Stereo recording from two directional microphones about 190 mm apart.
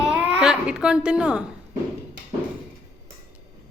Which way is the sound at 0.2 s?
5° right (ahead or behind).